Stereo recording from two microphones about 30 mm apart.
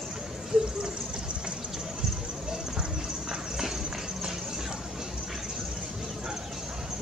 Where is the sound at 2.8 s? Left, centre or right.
Right.